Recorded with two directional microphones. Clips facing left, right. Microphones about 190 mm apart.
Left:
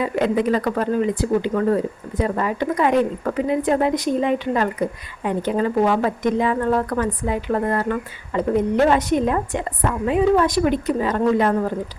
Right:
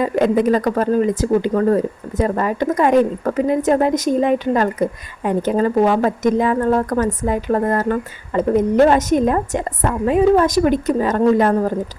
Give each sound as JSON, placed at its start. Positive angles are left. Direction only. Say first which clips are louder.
{"t": 0.0, "sound": "speech", "louder": "right 4 dB", "side_deg": -45}